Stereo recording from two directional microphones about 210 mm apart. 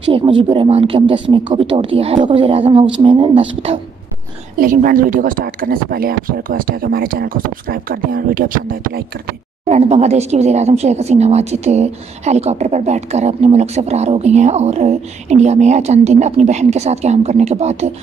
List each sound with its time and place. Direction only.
0.0 s a woman's voice: 25° right (ahead or behind)
4.6 s speech: 40° right (ahead or behind)
9.7 s speech: 30° right (ahead or behind)